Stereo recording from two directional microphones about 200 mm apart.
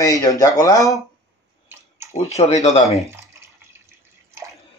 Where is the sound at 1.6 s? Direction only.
10° right (ahead or behind).